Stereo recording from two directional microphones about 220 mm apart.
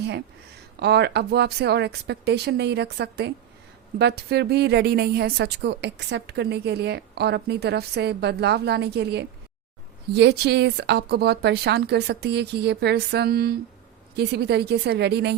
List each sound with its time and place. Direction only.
0.8 s a woman's voice: 50° right (ahead or behind)